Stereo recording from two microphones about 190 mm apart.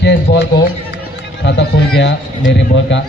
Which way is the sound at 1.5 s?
65° left (ahead or behind).